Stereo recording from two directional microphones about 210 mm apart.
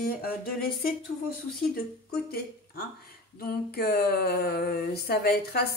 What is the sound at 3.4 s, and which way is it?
Speech, 45° left (ahead or behind).